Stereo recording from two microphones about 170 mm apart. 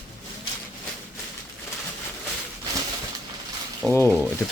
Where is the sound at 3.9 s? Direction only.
15° left (ahead or behind).